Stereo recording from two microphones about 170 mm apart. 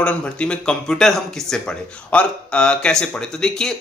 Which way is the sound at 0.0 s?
5° left (ahead or behind).